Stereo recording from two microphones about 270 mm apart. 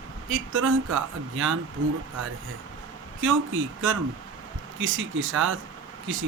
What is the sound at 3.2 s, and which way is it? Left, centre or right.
Speech, right.